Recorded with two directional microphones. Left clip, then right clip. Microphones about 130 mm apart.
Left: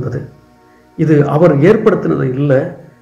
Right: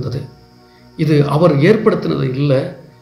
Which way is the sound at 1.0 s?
30° right (ahead or behind).